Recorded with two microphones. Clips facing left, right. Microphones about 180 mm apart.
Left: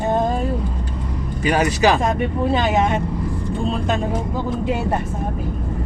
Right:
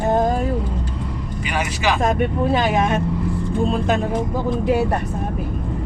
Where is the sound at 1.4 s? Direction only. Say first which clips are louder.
Left 6 dB; 40° left (ahead or behind).